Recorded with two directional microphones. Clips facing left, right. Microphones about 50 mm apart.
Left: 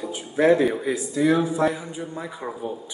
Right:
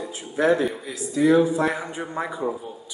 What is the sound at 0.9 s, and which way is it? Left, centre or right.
Speech, centre.